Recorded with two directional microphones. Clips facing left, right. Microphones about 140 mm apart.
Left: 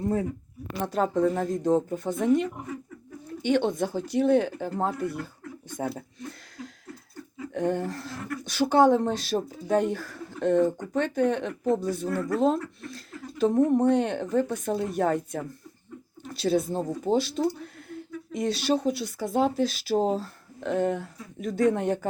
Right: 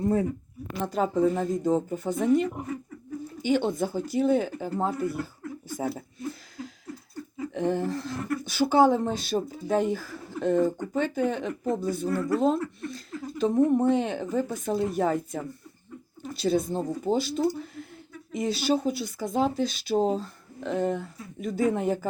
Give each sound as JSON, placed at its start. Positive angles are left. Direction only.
{"t": 0.9, "sound": "speech", "side_deg": 0}